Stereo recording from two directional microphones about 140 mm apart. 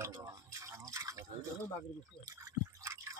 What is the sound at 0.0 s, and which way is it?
Drip, 25° right (ahead or behind).